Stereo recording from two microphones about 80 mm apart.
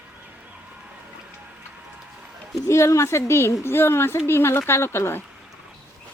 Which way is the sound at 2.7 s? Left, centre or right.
Left.